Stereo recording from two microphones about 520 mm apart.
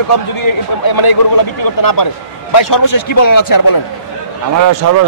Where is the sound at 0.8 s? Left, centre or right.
Left.